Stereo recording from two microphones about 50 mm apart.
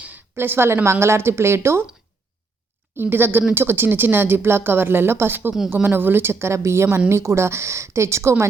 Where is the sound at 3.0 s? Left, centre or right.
Right.